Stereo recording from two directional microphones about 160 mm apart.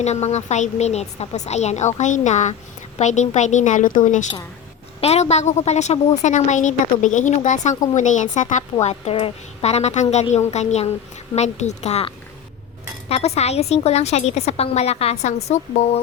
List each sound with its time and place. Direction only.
0.0 s a woman's voice: 45° left (ahead or behind)
4.9 s a woman's voice: 40° left (ahead or behind)